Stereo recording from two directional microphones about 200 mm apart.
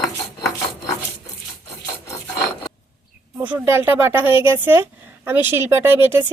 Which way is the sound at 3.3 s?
10° right (ahead or behind).